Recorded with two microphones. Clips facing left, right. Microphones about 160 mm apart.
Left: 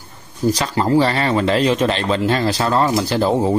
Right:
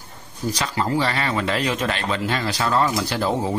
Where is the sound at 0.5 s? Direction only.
35° left (ahead or behind).